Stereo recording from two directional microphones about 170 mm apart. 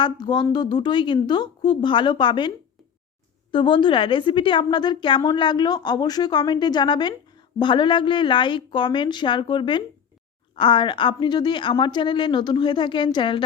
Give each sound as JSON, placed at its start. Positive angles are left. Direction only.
{"t": 0.0, "sound": "a woman's voice", "side_deg": 25}
{"t": 3.5, "sound": "a woman's voice", "side_deg": 30}